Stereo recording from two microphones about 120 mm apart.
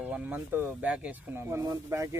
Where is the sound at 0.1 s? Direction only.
15° right (ahead or behind).